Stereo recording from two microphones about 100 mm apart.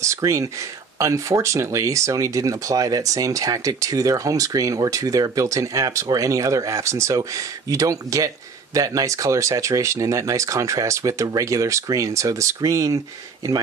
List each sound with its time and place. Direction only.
0.0 s speech: 30° right (ahead or behind)